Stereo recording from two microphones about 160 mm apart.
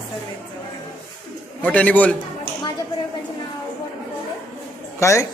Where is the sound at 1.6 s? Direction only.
10° left (ahead or behind).